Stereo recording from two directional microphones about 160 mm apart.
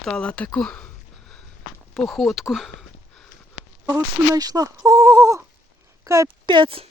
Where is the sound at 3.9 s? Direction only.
25° right (ahead or behind).